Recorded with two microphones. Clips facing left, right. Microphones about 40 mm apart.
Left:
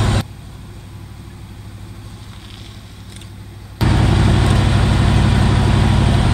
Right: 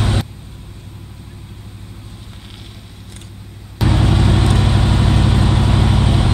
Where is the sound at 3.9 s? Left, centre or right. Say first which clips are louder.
Even; centre.